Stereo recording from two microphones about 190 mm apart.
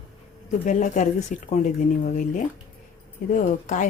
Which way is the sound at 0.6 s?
40° left (ahead or behind).